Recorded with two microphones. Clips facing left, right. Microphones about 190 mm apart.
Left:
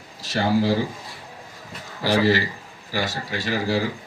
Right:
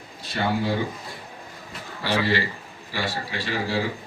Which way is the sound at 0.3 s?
90° left.